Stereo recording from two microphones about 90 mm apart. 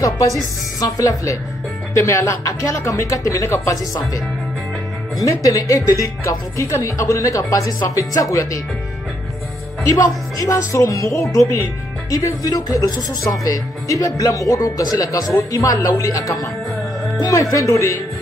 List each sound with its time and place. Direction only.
0.0 s speech: 40° left (ahead or behind)
5.2 s speech: 40° left (ahead or behind)
9.8 s speech: 40° left (ahead or behind)